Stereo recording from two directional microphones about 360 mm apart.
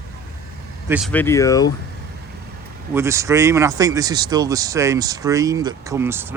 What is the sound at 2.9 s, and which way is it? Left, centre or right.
Speech, centre.